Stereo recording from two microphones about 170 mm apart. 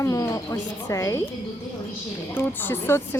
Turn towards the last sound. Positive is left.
turn(degrees=10)  # may be behind; listen again after turning